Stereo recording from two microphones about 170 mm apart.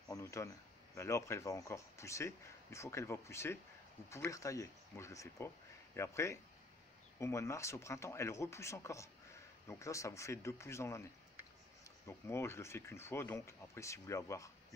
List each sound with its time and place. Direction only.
0.1 s speech: 15° left (ahead or behind)
12.1 s speech: 15° left (ahead or behind)